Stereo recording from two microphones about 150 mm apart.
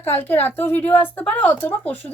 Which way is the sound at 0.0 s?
15° left (ahead or behind).